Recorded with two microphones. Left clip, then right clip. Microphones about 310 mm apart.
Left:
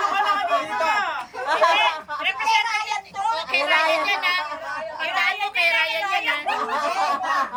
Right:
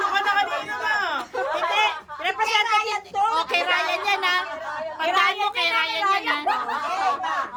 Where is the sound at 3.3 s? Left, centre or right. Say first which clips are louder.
Left 1 dB; centre.